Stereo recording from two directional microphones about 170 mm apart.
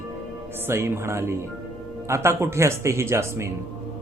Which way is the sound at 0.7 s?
15° right (ahead or behind).